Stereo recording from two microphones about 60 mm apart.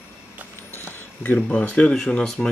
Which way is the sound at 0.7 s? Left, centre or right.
Left.